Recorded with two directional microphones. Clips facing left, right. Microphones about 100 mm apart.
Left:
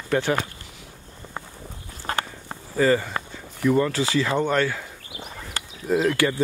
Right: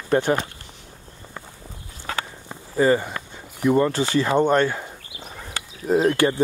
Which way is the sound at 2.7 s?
20° right (ahead or behind).